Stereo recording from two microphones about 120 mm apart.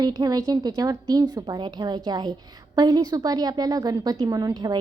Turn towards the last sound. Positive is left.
turn(degrees=-35)  # may be behind; listen again after turning